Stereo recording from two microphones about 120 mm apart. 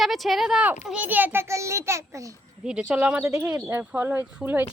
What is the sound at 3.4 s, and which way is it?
A child's voice, 25° right (ahead or behind).